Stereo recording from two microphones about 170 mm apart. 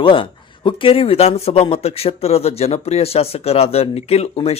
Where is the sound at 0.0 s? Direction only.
30° left (ahead or behind).